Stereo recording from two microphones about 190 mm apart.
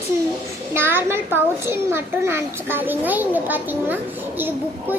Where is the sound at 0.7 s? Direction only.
10° right (ahead or behind).